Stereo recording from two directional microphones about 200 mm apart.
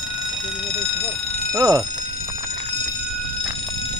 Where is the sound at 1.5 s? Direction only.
15° right (ahead or behind).